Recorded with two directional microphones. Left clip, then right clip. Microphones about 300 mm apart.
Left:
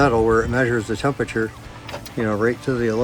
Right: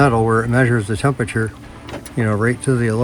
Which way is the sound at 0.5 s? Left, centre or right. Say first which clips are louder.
Right 3 dB; centre.